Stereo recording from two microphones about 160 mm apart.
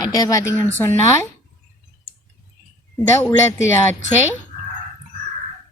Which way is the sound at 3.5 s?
15° left (ahead or behind).